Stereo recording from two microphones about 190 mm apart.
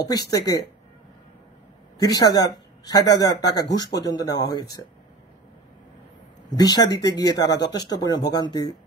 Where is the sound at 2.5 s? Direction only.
20° left (ahead or behind).